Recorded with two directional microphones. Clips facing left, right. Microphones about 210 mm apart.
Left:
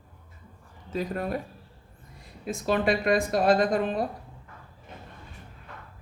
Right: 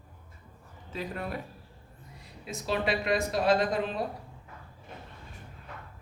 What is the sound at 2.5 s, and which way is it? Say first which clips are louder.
Speech: left 5 dB; 50° left (ahead or behind).